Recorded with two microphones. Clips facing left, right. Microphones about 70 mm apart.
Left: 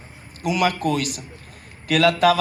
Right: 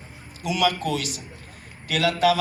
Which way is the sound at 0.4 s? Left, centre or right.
Left.